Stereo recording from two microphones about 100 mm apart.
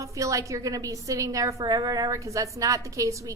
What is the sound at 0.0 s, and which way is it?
Speech, 35° right (ahead or behind).